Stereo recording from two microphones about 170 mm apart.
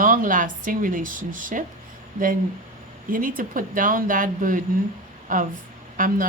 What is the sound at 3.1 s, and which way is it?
Speech, 55° right (ahead or behind).